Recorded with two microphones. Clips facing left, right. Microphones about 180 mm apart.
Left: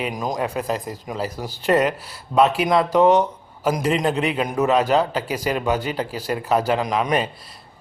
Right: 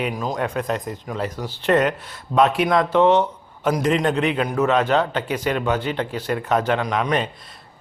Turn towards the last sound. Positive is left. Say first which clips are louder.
# left 1 dB
turn(degrees=0)  # may be behind; listen again after turning